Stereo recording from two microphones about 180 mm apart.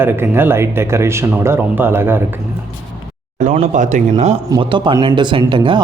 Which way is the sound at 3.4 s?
45° right (ahead or behind).